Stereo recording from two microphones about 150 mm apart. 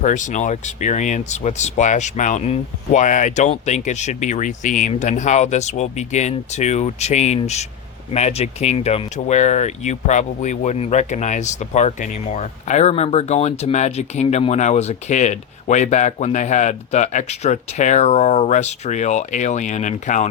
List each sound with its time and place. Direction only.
0.0 s speech: 55° left (ahead or behind)